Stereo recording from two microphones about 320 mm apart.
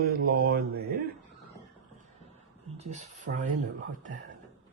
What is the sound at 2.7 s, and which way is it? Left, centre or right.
Speech, right.